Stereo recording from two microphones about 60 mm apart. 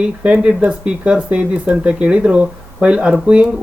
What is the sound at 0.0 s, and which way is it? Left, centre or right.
Speech, centre.